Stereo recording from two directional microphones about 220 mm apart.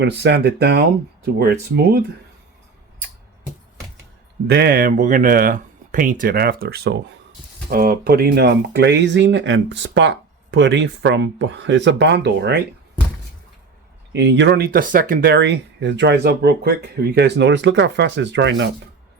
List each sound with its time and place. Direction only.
0.0 s speech: 50° right (ahead or behind)
4.4 s speech: 45° right (ahead or behind)
14.1 s speech: 50° right (ahead or behind)